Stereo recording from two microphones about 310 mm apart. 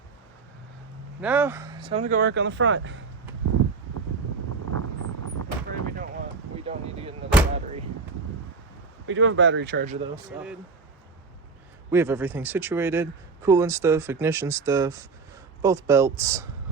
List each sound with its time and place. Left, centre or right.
1.2 s speech: centre; by 3.0 s right
4.8 s vehicle: right
6.7 s a sound: centre
7.5 s door: centre
9.0 s speech: right
10.3 s speech: centre
11.9 s a man's voice: centre